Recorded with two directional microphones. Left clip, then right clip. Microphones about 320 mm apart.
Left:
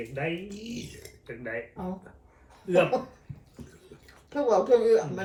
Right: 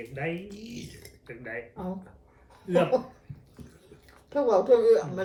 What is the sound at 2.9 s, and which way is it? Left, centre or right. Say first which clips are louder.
Speech: right 3 dB; centre.